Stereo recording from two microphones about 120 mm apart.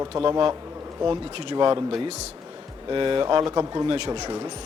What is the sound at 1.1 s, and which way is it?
Speech, 40° right (ahead or behind).